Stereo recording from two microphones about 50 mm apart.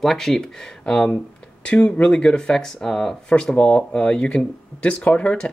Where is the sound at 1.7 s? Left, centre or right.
Left.